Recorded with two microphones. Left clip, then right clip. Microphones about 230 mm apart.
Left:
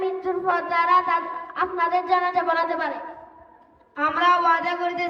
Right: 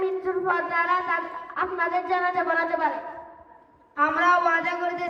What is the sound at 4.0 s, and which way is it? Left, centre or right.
Speech, left.